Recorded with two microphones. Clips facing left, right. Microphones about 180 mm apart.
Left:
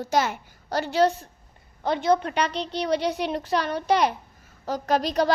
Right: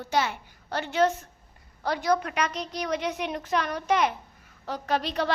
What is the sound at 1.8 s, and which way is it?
A woman's voice, 25° left (ahead or behind).